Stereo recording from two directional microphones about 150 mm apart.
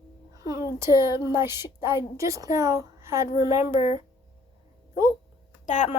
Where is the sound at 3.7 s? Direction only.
45° left (ahead or behind).